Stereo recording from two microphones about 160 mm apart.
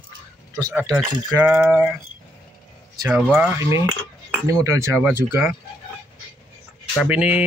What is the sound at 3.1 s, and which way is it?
Speech, 10° right (ahead or behind).